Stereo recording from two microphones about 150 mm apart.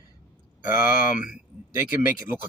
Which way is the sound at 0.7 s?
15° right (ahead or behind).